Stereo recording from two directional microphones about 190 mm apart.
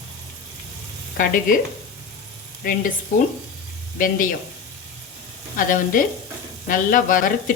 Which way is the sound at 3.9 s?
45° left (ahead or behind).